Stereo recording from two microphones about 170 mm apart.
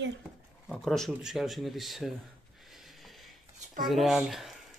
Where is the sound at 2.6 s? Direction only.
Centre (ahead or behind).